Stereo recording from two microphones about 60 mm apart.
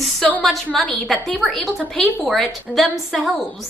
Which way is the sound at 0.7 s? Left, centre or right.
Centre.